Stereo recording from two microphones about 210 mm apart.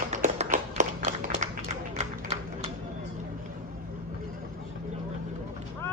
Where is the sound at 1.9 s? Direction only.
35° right (ahead or behind).